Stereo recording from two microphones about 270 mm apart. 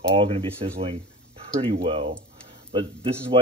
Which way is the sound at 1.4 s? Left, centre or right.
Right.